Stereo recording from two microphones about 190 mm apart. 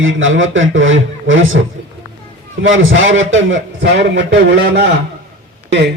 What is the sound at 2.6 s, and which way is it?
A man's voice, 90° right.